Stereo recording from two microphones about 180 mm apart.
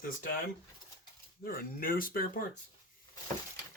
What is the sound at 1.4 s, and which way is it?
Speech, 55° left (ahead or behind).